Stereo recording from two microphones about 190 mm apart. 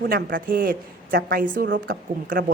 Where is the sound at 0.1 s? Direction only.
50° right (ahead or behind).